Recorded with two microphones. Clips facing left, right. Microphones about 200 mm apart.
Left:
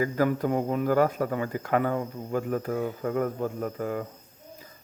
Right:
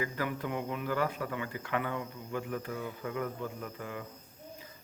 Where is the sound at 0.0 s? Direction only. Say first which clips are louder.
Left 10 dB; 40° left (ahead or behind).